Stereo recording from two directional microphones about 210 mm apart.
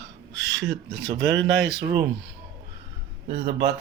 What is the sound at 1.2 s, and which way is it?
Speech, 55° right (ahead or behind).